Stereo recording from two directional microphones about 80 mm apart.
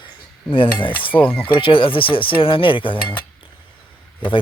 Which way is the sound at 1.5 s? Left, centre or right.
Left.